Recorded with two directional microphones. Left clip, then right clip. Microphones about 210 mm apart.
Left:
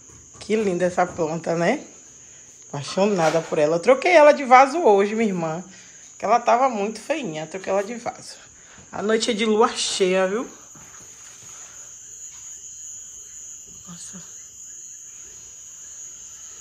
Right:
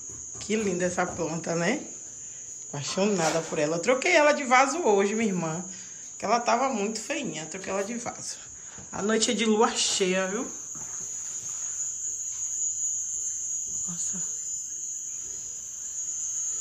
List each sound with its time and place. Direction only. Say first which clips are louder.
0.5 s speech: left 6 dB; 5° right (ahead or behind)
2.9 s speech: left 6 dB; 10° right (ahead or behind)
13.8 s a sound: right 7 dB; 20° right (ahead or behind)